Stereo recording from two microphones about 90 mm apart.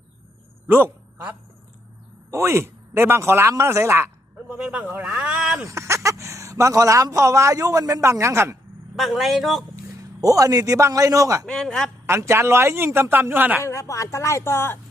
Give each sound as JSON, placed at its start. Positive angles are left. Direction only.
{"t": 0.7, "sound": "a man's voice", "side_deg": -25}
{"t": 4.5, "sound": "speech", "side_deg": -5}
{"t": 4.8, "sound": "speech", "side_deg": -20}
{"t": 5.5, "sound": "a man's voice", "side_deg": -35}
{"t": 9.0, "sound": "a man's voice", "side_deg": 0}
{"t": 10.0, "sound": "a man's voice", "side_deg": -40}
{"t": 11.4, "sound": "a man's voice", "side_deg": 5}
{"t": 12.0, "sound": "a man's voice", "side_deg": -30}
{"t": 13.6, "sound": "speech", "side_deg": 35}